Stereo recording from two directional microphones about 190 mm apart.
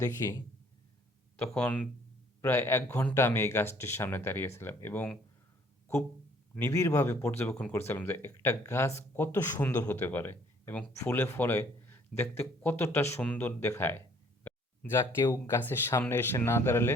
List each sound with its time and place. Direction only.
0.0 s a man's voice: 20° left (ahead or behind)
1.5 s a man's voice: 5° left (ahead or behind)
6.5 s a man's voice: 10° left (ahead or behind)
14.4 s a sound: 10° left (ahead or behind)
15.2 s a man's voice: 15° left (ahead or behind)